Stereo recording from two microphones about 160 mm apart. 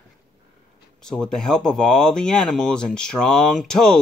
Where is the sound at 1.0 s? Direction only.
5° left (ahead or behind).